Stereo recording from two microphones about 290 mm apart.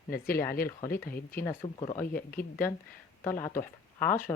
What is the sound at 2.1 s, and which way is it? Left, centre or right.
Speech, left.